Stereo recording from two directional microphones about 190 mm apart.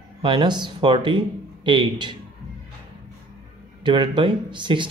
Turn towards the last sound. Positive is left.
turn(degrees=-25)  # may be behind; listen again after turning